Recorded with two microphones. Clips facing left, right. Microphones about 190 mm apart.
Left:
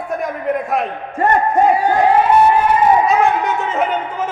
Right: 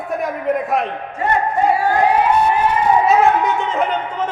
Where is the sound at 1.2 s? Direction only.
50° left (ahead or behind).